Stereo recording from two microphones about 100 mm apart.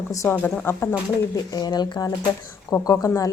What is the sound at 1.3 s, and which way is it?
Speech, 45° left (ahead or behind).